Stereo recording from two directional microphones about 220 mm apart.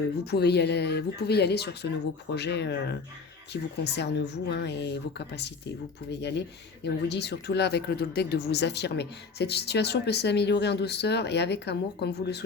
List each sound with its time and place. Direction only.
0.3 s speech: 50° left (ahead or behind)